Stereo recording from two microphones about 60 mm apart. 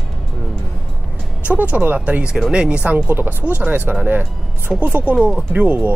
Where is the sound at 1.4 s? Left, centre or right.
Right.